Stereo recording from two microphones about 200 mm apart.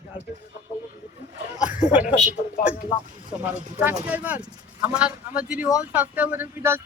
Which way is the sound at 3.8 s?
10° right (ahead or behind).